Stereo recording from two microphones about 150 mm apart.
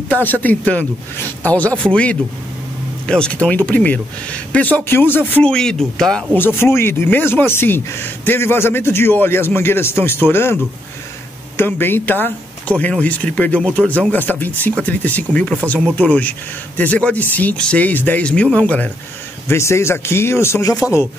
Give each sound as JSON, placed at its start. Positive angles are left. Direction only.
{"t": 0.1, "sound": "speech", "side_deg": 10}